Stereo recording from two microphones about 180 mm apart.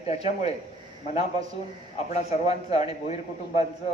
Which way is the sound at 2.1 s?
35° left (ahead or behind).